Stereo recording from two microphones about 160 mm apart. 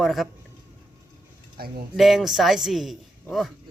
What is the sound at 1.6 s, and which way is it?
Speech, 70° right (ahead or behind).